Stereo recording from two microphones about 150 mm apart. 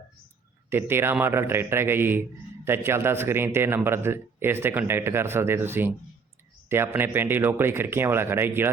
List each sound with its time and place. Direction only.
0.7 s a man's voice: 15° right (ahead or behind)